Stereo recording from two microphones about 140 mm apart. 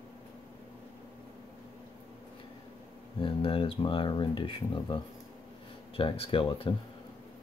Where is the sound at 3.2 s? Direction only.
40° left (ahead or behind).